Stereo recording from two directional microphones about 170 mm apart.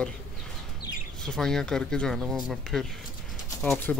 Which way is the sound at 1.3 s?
5° left (ahead or behind).